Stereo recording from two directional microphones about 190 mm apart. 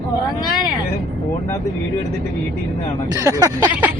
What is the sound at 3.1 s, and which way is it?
Speech, 20° right (ahead or behind).